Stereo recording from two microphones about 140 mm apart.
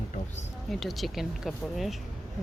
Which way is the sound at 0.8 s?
Centre (ahead or behind).